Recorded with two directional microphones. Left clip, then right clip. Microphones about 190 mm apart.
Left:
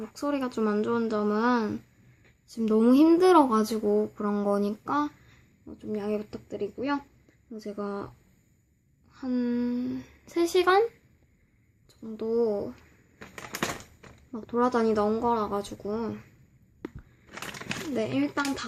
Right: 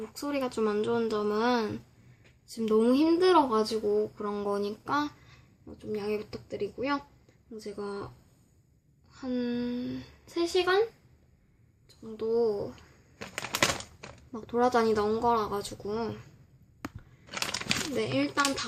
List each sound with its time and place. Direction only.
0.0 s speech: 15° left (ahead or behind)
9.1 s speech: 15° left (ahead or behind)
10.3 s speech: 35° left (ahead or behind)
11.9 s speech: 20° left (ahead or behind)
14.3 s speech: 10° left (ahead or behind)
17.9 s speech: 15° left (ahead or behind)